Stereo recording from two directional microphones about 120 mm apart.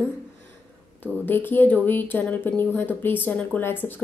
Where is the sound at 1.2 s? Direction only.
15° left (ahead or behind).